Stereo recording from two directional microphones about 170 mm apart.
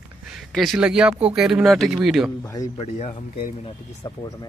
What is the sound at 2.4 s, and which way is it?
Speech, 20° left (ahead or behind).